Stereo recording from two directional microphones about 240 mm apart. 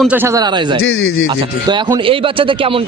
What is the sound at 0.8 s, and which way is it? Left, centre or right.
Speech, left.